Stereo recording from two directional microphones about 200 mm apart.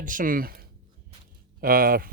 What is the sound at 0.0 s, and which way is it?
Speech, 40° right (ahead or behind).